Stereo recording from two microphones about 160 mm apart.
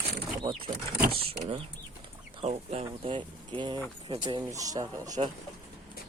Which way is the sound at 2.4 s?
40° right (ahead or behind).